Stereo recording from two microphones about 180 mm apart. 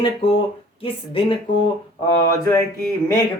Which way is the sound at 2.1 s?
20° left (ahead or behind).